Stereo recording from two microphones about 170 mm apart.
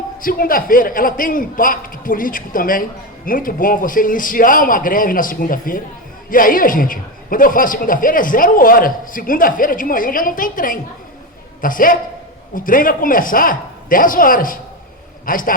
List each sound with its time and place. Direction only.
0.2 s a man's voice: 55° left (ahead or behind)